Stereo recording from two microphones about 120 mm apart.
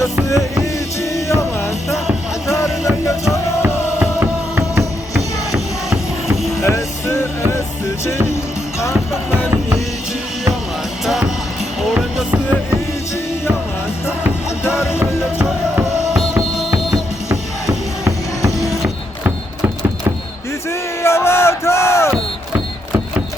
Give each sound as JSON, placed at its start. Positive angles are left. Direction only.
{"t": 1.1, "sound": "music", "side_deg": 25}
{"t": 2.6, "sound": "music", "side_deg": -5}
{"t": 6.6, "sound": "music", "side_deg": 25}
{"t": 11.0, "sound": "music", "side_deg": -5}
{"t": 14.6, "sound": "music", "side_deg": 20}
{"t": 14.9, "sound": "music", "side_deg": -5}
{"t": 21.0, "sound": "a sound", "side_deg": 20}